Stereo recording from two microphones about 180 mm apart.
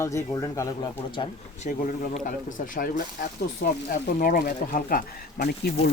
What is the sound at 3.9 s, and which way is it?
Speech, 50° left (ahead or behind).